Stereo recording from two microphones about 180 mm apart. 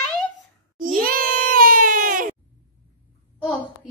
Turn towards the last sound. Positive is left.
turn(degrees=5)  # may be behind; listen again after turning